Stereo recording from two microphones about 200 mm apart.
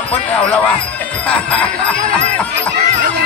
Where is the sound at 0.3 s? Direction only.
5° left (ahead or behind).